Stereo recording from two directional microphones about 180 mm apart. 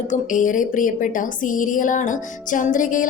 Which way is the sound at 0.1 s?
45° left (ahead or behind).